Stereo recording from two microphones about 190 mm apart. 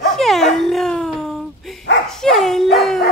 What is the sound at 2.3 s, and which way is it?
Speech, centre (ahead or behind).